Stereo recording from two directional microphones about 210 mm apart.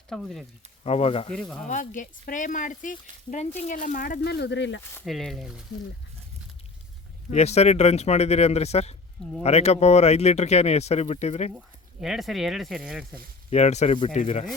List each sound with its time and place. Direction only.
0.1 s speech: centre (ahead or behind)
0.9 s speech: 30° left (ahead or behind)
1.3 s speech: 5° left (ahead or behind)
1.6 s speech: 35° left (ahead or behind); by 4.8 s 55° left (ahead or behind)
4.9 s speech: centre (ahead or behind)
7.3 s speech: 30° left (ahead or behind)
11.5 s speech: centre (ahead or behind)
13.5 s speech: 30° left (ahead or behind)